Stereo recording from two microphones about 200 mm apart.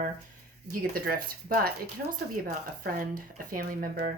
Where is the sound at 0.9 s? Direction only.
45° right (ahead or behind).